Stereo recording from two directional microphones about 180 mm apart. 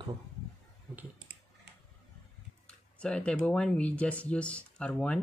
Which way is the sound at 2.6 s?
5° left (ahead or behind).